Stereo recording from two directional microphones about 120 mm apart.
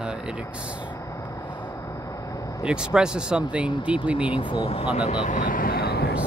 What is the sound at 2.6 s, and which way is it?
Speech, 5° right (ahead or behind).